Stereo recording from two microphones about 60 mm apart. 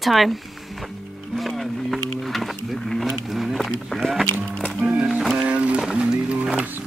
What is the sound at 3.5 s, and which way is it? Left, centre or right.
Speech, centre.